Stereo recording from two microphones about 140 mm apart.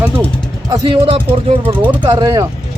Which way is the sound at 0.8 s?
35° right (ahead or behind).